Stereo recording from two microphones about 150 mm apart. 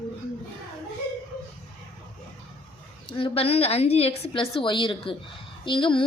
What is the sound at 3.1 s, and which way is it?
Speech, 40° left (ahead or behind).